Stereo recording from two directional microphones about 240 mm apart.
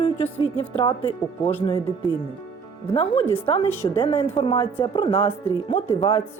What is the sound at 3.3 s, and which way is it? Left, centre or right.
Speech, left.